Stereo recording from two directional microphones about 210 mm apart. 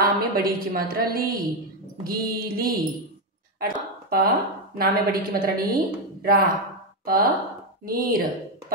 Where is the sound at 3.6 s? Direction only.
45° right (ahead or behind).